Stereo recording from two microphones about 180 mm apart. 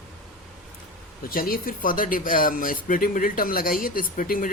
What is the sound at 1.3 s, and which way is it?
Speech, 55° left (ahead or behind).